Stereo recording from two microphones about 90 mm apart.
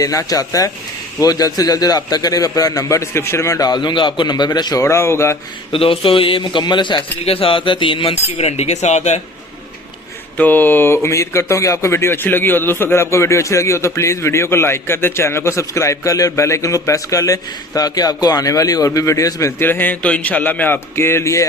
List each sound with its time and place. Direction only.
0.0 s speech: 40° left (ahead or behind)
3.7 s a man's voice: 55° left (ahead or behind)
4.8 s speech: 35° left (ahead or behind)
5.7 s a man's voice: 90° left; by 8.1 s 75° left (ahead or behind)
10.3 s speech: 20° left (ahead or behind)